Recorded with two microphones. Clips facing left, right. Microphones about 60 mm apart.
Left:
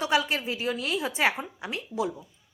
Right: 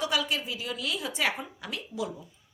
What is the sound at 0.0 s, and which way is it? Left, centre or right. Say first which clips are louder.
A woman's voice: left 4 dB; left.